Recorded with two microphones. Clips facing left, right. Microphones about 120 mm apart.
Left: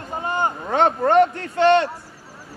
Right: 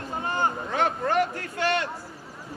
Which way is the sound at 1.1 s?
25° left (ahead or behind).